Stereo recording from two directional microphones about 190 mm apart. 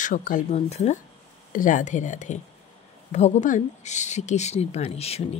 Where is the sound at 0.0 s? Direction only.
45° left (ahead or behind).